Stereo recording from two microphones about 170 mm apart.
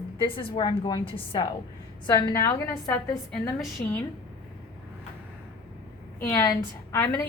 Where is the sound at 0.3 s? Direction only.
30° left (ahead or behind).